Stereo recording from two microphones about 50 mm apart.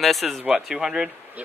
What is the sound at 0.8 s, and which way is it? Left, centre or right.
Speech, centre.